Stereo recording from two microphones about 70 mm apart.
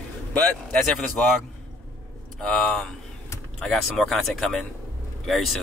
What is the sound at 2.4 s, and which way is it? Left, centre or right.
Speech, centre.